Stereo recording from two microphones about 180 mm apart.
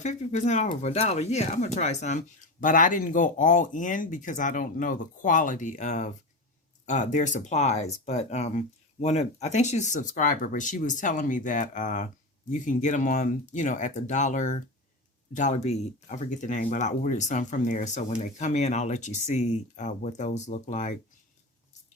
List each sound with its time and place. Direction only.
0.0 s speech: 40° left (ahead or behind)